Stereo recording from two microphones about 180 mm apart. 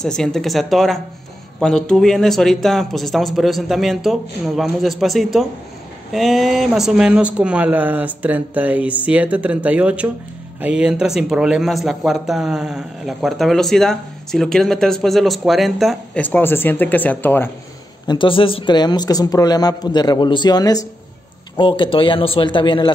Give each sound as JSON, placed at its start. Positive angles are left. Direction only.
{"t": 0.0, "sound": "speech", "side_deg": 5}
{"t": 18.0, "sound": "speech", "side_deg": 25}